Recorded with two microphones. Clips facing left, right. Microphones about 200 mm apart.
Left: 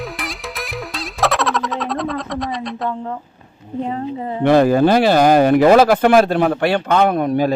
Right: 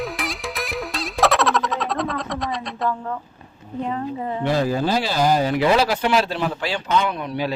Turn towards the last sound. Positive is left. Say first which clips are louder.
# left 9 dB
turn(degrees=50)  # may be behind; listen again after turning